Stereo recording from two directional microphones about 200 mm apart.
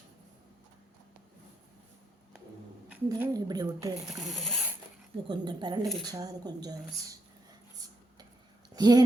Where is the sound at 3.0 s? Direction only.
20° right (ahead or behind).